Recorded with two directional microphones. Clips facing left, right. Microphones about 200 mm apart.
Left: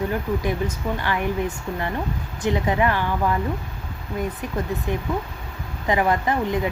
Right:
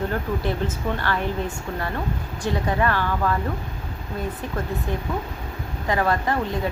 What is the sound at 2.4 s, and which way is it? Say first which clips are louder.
Speech: left 2 dB; 20° left (ahead or behind).